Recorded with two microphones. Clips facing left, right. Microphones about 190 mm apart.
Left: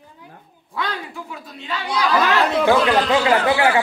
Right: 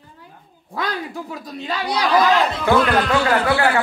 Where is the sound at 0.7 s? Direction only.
40° right (ahead or behind).